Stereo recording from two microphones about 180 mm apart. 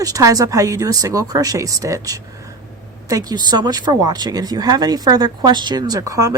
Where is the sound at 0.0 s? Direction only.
20° right (ahead or behind).